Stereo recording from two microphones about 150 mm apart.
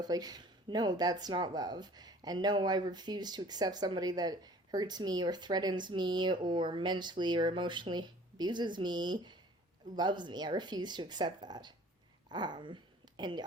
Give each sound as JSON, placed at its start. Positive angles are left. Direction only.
{"t": 0.0, "sound": "speech", "side_deg": -25}